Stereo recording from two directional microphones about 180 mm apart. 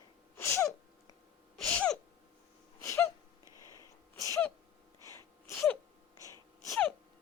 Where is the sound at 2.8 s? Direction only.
15° left (ahead or behind).